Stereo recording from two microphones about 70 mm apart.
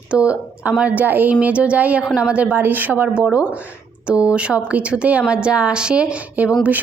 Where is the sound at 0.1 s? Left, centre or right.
Centre.